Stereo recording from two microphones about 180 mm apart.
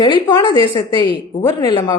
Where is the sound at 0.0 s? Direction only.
25° left (ahead or behind).